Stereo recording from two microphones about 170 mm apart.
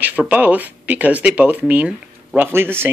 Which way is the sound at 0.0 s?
10° right (ahead or behind).